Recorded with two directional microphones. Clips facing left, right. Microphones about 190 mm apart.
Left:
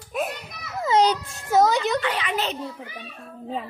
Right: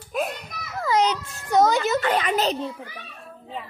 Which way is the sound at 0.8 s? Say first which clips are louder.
Left 2 dB; 25° left (ahead or behind).